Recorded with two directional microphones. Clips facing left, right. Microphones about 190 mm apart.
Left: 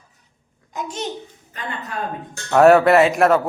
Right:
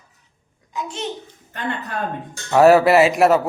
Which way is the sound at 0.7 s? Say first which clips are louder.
Even; 45° left (ahead or behind).